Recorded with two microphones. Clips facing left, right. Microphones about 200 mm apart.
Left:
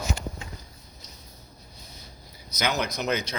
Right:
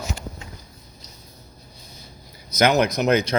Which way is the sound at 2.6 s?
75° right (ahead or behind).